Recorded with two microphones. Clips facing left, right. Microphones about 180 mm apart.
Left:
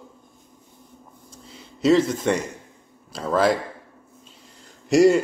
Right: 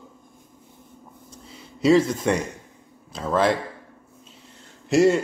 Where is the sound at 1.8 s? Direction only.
5° right (ahead or behind).